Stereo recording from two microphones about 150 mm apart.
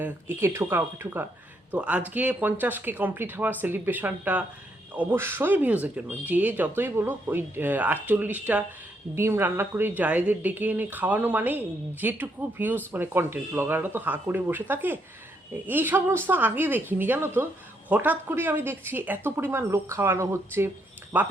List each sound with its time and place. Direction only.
0.0 s speech: 15° right (ahead or behind)